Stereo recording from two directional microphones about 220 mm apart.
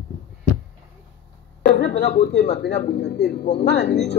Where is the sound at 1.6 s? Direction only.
45° left (ahead or behind).